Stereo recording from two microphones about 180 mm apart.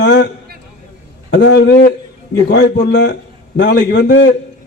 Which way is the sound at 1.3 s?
70° left (ahead or behind).